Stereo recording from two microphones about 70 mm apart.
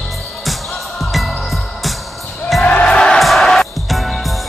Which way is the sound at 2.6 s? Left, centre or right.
Centre.